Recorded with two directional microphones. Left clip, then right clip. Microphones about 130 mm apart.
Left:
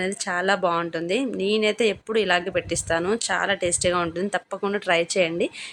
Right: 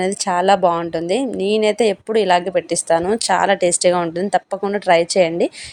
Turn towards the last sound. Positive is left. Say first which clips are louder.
# right 7 dB
turn(degrees=-30)  # may be behind; listen again after turning